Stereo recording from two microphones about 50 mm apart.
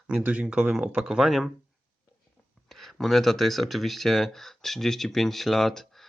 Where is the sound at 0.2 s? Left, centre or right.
Right.